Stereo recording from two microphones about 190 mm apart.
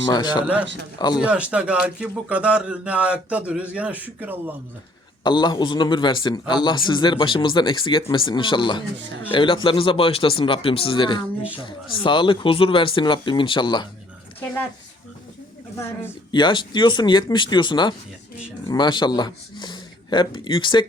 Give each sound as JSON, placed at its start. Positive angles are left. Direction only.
{"t": 0.1, "sound": "a man's voice", "side_deg": 25}
{"t": 1.2, "sound": "a man's voice", "side_deg": -5}
{"t": 5.2, "sound": "a man's voice", "side_deg": 25}
{"t": 16.3, "sound": "a man's voice", "side_deg": 25}